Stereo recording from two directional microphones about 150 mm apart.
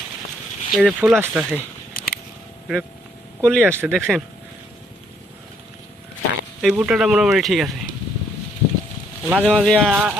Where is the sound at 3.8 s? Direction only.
5° left (ahead or behind).